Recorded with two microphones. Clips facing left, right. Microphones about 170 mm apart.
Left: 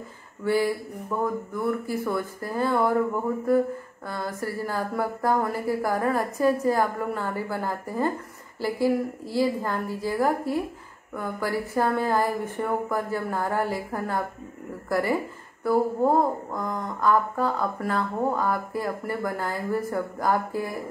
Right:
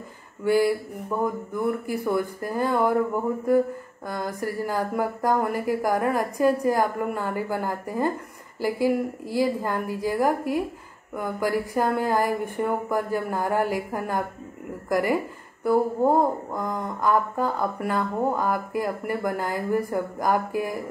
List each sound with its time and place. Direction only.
1.2 s speech: 15° right (ahead or behind)
4.1 s speech: 15° right (ahead or behind)